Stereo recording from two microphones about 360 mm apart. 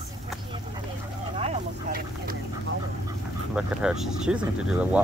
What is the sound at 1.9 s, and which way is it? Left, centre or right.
Speech, right.